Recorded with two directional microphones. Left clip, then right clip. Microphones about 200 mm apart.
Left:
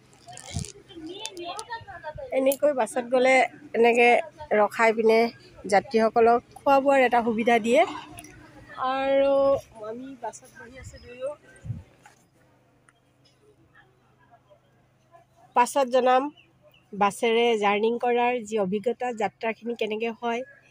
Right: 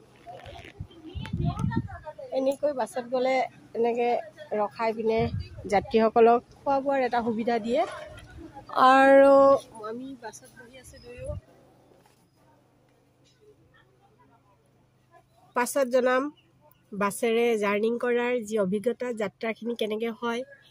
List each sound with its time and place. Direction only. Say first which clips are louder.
1.5 s a sound: even; 55° left (ahead or behind)
2.3 s speech: left 3 dB; 10° left (ahead or behind)
2.6 s speech: left 4 dB; 25° left (ahead or behind)
5.7 s speech: left 2 dB; 10° right (ahead or behind)
6.6 s speech: left 6 dB; 20° left (ahead or behind)
8.7 s speech: right 9 dB; 60° right (ahead or behind)
9.1 s a woman's voice: even; 35° right (ahead or behind)
9.8 s speech: left 1 dB; 5° right (ahead or behind)
15.5 s a woman's voice: left 3 dB; 35° right (ahead or behind)